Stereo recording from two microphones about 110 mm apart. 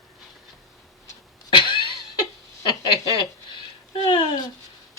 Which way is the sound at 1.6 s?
45° left (ahead or behind).